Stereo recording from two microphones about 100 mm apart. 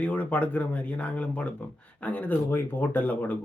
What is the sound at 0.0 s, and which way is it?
A man's voice, 15° left (ahead or behind).